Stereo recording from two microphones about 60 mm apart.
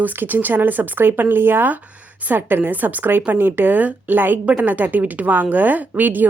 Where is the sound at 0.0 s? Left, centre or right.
Right.